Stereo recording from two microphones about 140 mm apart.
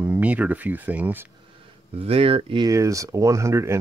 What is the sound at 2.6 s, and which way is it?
Speech, 25° right (ahead or behind).